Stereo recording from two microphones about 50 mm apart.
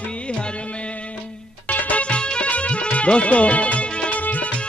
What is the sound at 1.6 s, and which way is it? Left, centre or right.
Music, left.